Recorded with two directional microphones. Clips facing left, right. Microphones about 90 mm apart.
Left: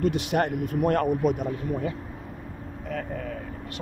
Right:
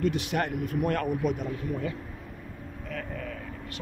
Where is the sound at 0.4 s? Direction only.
30° left (ahead or behind).